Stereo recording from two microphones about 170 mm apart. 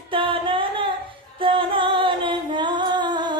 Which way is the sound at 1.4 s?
30° right (ahead or behind).